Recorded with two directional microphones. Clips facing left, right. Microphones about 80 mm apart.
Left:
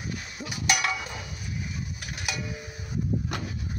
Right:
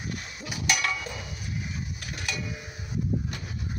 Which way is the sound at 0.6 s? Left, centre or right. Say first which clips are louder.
Left 1 dB; centre.